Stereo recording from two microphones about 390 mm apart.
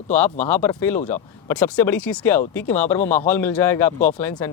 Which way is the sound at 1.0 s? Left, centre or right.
Centre.